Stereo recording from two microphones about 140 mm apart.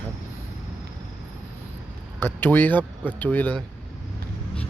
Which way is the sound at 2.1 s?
15° left (ahead or behind).